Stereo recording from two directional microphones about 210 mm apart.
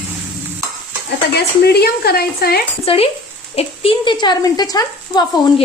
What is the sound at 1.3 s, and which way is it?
Speech, 50° left (ahead or behind).